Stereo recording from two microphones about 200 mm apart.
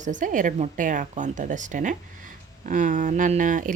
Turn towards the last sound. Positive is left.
turn(degrees=-40)  # may be behind; listen again after turning